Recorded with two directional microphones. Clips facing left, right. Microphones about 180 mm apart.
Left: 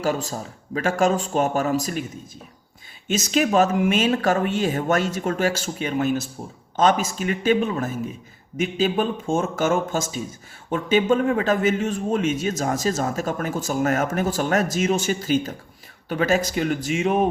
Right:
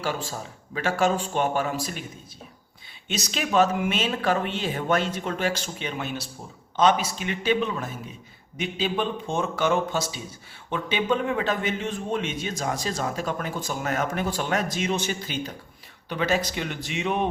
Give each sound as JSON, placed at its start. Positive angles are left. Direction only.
{"t": 0.0, "sound": "speech", "side_deg": 40}
{"t": 3.1, "sound": "a man's voice", "side_deg": 40}